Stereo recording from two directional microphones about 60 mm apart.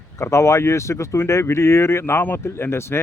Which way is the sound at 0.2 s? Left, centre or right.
Left.